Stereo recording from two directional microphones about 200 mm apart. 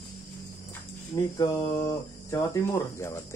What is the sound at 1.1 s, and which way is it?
Speech, 15° left (ahead or behind).